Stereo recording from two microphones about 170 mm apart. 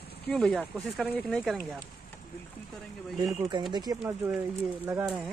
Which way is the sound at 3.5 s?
25° right (ahead or behind).